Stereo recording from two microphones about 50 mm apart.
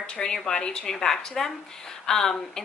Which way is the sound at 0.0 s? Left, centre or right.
Centre.